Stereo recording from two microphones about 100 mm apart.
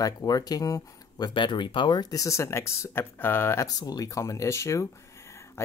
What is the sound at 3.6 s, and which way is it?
Speech, 40° left (ahead or behind).